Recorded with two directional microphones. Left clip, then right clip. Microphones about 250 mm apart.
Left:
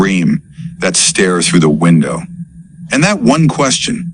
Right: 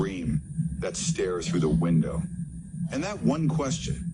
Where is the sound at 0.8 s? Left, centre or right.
Left.